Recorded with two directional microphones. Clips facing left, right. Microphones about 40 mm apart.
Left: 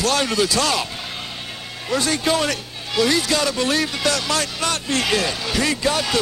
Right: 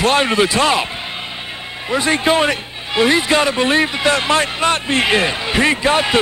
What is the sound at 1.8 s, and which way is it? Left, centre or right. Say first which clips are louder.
Speech: right 4 dB; right.